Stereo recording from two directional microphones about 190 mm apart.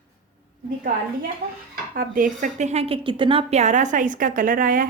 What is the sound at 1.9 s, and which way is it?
Speech, 45° right (ahead or behind).